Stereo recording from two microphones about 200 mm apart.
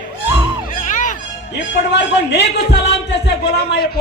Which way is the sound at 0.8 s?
40° left (ahead or behind).